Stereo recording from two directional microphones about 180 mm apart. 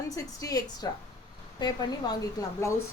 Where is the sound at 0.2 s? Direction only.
20° left (ahead or behind).